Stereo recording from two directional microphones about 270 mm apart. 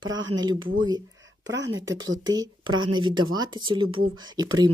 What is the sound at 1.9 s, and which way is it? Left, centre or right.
Speech, right.